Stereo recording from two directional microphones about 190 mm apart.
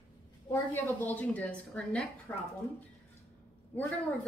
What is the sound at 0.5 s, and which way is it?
A woman's voice, 10° left (ahead or behind).